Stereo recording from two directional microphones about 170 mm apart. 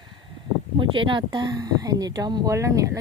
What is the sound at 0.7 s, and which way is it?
Speech, 30° right (ahead or behind).